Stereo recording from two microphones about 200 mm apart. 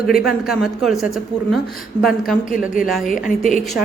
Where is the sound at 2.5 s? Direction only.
45° left (ahead or behind).